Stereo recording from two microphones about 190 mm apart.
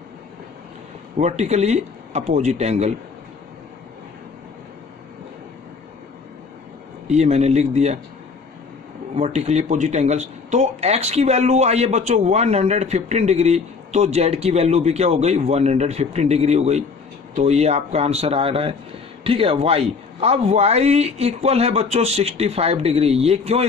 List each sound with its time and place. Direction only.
1.1 s speech: 35° right (ahead or behind)
7.1 s speech: 35° right (ahead or behind)
9.1 s speech: 35° right (ahead or behind)